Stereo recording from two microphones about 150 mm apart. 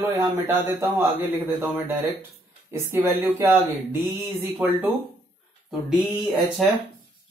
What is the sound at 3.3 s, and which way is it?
Speech, 20° right (ahead or behind).